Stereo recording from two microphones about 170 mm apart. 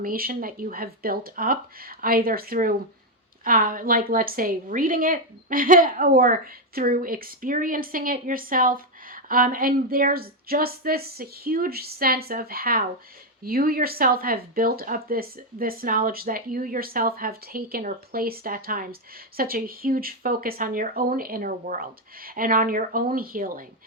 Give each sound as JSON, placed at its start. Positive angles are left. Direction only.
{"t": 0.0, "sound": "a woman's voice", "side_deg": -60}